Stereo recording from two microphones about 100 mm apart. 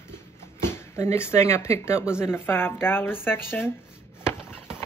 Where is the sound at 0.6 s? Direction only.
25° left (ahead or behind).